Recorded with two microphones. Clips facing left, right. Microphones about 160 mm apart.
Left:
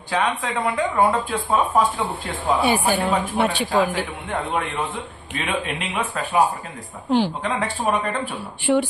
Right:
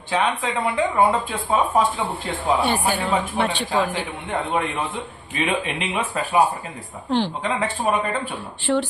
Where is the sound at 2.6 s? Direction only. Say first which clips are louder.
Left 2 dB; 10° left (ahead or behind).